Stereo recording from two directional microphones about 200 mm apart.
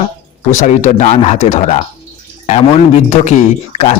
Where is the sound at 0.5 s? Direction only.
35° left (ahead or behind).